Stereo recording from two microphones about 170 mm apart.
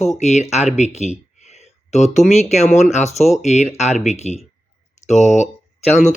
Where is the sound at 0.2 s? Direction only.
40° left (ahead or behind).